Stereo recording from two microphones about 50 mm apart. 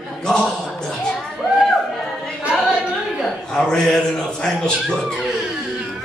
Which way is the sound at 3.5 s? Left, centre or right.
Centre.